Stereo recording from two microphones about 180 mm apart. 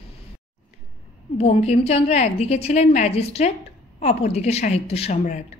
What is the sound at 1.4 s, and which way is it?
A woman's voice, 35° left (ahead or behind).